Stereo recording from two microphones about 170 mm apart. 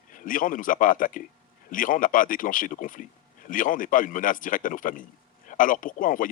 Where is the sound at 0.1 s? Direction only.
50° left (ahead or behind).